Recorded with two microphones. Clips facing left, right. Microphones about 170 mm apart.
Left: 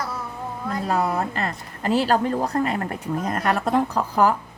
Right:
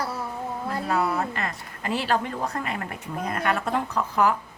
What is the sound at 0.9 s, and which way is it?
A woman's voice, 35° left (ahead or behind).